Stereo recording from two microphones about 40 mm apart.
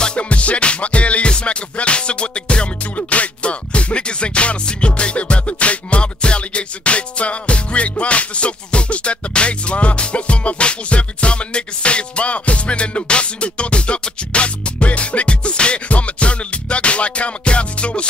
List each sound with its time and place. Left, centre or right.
0.2 s music: left